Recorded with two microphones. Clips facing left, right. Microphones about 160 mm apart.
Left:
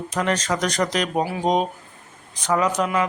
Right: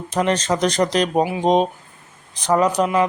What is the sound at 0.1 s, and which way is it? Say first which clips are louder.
Speech: right 4 dB; 30° right (ahead or behind).